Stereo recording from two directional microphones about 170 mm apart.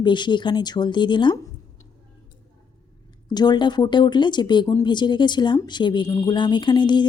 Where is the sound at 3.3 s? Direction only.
25° left (ahead or behind).